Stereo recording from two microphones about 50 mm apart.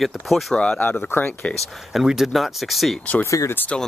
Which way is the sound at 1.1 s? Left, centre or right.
Left.